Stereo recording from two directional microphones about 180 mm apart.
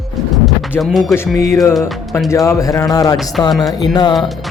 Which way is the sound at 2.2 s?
15° left (ahead or behind).